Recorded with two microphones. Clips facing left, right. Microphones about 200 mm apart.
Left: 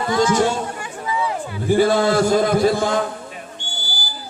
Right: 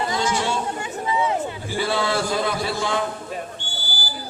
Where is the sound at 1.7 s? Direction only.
45° left (ahead or behind).